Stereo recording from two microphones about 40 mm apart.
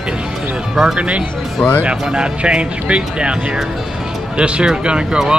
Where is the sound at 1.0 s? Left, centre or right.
Right.